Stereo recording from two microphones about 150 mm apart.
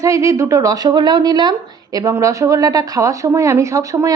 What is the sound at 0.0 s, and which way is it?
A woman's voice, 20° right (ahead or behind).